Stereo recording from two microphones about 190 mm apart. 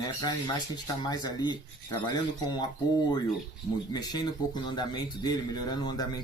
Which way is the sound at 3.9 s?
20° left (ahead or behind).